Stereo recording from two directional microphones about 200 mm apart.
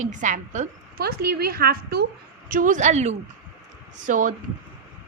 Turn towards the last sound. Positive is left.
turn(degrees=-40)  # may be behind; listen again after turning